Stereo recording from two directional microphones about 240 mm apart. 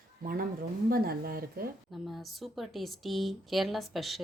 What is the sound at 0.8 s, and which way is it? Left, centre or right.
Speech, right.